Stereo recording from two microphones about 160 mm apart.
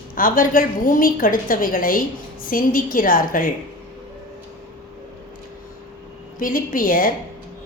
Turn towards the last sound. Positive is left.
turn(degrees=60)  # may be behind; listen again after turning